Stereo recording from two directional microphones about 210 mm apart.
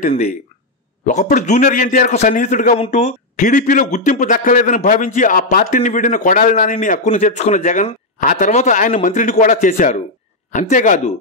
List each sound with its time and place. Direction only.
1.0 s a man's voice: 35° left (ahead or behind)